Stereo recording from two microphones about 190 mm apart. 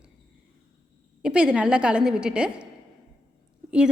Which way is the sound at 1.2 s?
5° right (ahead or behind).